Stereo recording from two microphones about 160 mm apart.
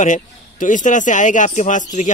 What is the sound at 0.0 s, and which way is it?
Speech, 55° left (ahead or behind).